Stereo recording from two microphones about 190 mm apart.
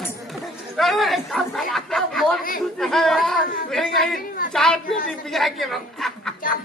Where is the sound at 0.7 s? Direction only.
Centre (ahead or behind).